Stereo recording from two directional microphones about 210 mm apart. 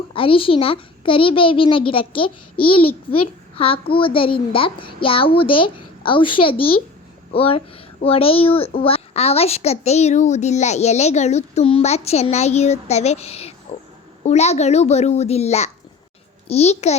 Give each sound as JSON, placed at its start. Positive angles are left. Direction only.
{"t": 0.1, "sound": "a child's voice", "side_deg": 25}
{"t": 13.7, "sound": "a sound", "side_deg": 30}
{"t": 14.3, "sound": "a child's voice", "side_deg": 30}